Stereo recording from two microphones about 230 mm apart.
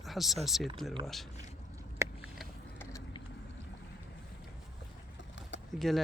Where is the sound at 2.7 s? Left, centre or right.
Centre.